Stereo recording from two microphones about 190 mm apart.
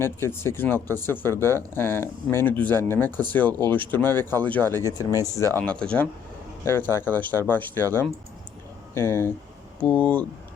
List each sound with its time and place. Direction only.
0.0 s speech: 10° left (ahead or behind)
5.5 s speech: 5° left (ahead or behind)